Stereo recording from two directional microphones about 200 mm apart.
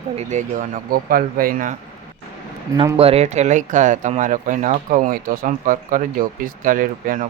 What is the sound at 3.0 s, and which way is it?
Speech, 30° right (ahead or behind).